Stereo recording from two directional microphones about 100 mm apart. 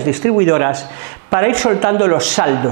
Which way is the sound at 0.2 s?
25° right (ahead or behind).